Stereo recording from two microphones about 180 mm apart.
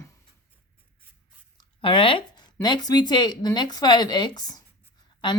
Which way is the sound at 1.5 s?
30° left (ahead or behind).